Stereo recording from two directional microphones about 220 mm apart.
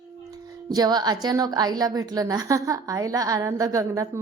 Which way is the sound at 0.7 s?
20° right (ahead or behind).